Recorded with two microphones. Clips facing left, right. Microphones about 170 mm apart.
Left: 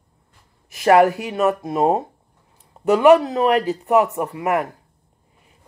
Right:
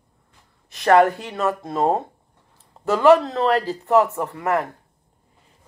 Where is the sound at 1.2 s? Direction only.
20° left (ahead or behind).